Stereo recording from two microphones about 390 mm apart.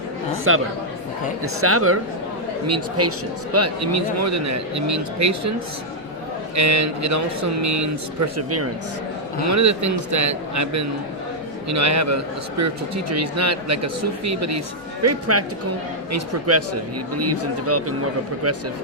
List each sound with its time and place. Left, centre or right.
0.5 s a man's voice: right
1.6 s a man's voice: right
6.6 s a man's voice: right